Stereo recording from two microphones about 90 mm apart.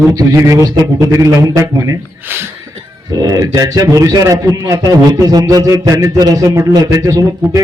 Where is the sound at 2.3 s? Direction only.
25° right (ahead or behind).